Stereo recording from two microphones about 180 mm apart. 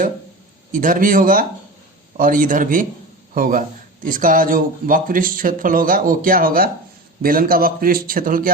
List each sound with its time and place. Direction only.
0.7 s speech: 50° right (ahead or behind)